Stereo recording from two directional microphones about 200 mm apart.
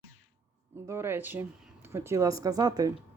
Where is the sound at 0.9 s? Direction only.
10° right (ahead or behind).